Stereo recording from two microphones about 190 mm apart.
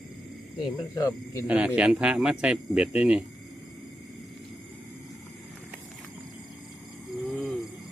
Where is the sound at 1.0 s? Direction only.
15° left (ahead or behind).